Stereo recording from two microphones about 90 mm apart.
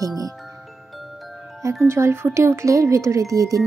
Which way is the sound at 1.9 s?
30° right (ahead or behind).